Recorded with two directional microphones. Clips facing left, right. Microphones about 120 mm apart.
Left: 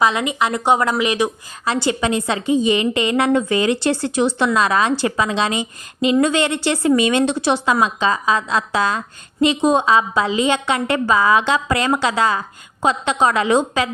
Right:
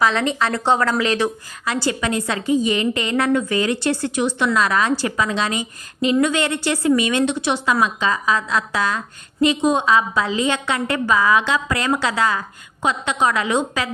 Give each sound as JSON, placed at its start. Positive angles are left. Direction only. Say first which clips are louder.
{"t": 0.0, "sound": "a woman's voice", "louder": "left 1 dB", "side_deg": 10}